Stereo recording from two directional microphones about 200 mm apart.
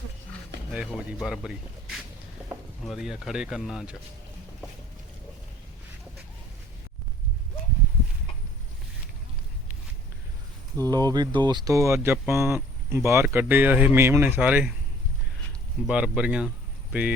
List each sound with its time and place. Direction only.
0.7 s speech: 5° right (ahead or behind)
10.8 s speech: 20° right (ahead or behind)
15.8 s speech: 5° right (ahead or behind)